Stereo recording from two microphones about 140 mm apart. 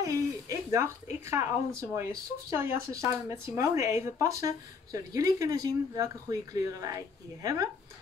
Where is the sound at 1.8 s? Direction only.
20° right (ahead or behind).